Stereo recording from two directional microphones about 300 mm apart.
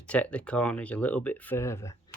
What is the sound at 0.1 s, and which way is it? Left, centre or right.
Speech, centre.